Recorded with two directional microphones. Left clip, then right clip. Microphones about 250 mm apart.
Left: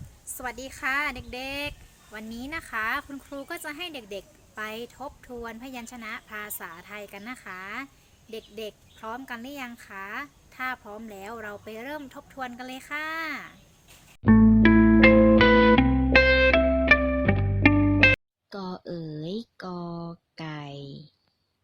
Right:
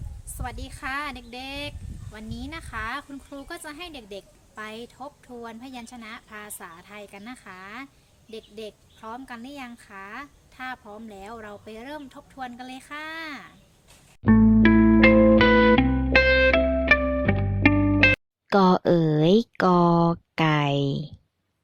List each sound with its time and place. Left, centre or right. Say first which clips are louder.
0.3 s speech: left 2 dB; centre
14.3 s music: even; centre
18.4 s speech: right 18 dB; right